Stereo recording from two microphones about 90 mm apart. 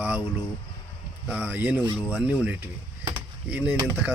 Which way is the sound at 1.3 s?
15° right (ahead or behind).